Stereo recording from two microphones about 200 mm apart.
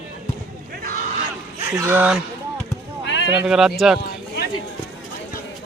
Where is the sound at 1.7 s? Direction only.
10° right (ahead or behind).